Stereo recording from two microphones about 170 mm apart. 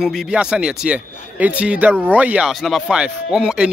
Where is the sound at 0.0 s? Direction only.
Centre (ahead or behind).